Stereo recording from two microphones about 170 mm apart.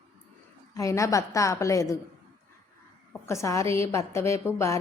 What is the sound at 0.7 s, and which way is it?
A woman's voice, 20° left (ahead or behind).